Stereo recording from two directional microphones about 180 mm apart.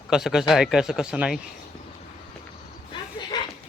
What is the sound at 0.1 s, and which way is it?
Speech, 5° right (ahead or behind).